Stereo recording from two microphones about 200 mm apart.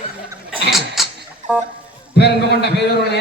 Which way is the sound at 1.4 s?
35° right (ahead or behind).